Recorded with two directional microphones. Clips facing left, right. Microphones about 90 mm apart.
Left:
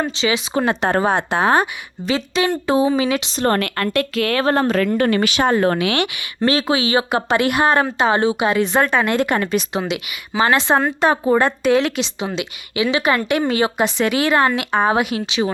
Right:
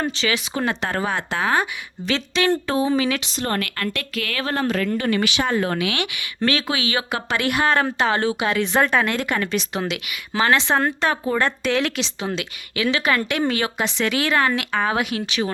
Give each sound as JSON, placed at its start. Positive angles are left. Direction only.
{"t": 0.2, "sound": "speech", "side_deg": 25}
{"t": 0.9, "sound": "speech", "side_deg": 35}
{"t": 1.1, "sound": "speech", "side_deg": 20}
{"t": 2.0, "sound": "speech", "side_deg": 10}
{"t": 3.3, "sound": "speech", "side_deg": 40}
{"t": 6.4, "sound": "a woman's voice", "side_deg": 30}
{"t": 9.0, "sound": "speech", "side_deg": 20}
{"t": 9.8, "sound": "speech", "side_deg": 5}
{"t": 12.2, "sound": "speech", "side_deg": 15}